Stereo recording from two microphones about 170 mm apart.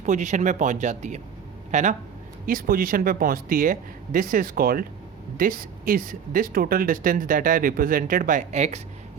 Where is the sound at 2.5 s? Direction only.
55° right (ahead or behind).